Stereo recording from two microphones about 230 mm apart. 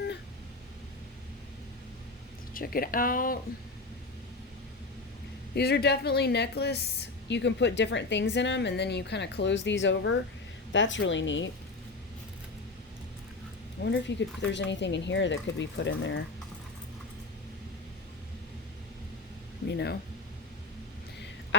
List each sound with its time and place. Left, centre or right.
2.5 s speech: left
5.5 s a woman's voice: left
13.8 s a woman's voice: left
19.7 s a woman's voice: left